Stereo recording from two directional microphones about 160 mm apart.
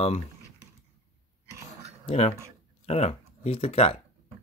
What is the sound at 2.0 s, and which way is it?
Speech, 40° left (ahead or behind).